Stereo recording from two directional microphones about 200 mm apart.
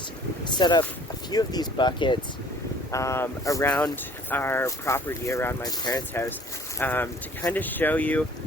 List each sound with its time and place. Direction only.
0.4 s speech: 20° left (ahead or behind)